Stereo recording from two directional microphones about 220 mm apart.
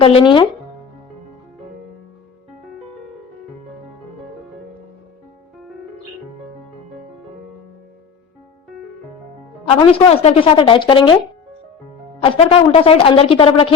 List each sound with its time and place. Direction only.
0.0 s speech: 25° left (ahead or behind)
9.6 s speech: 25° left (ahead or behind)
12.2 s speech: 25° left (ahead or behind)